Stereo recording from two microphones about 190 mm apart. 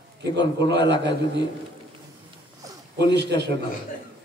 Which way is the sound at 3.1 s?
65° right (ahead or behind).